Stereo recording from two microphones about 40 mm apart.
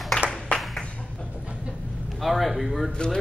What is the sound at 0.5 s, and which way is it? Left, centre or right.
Clapping, left.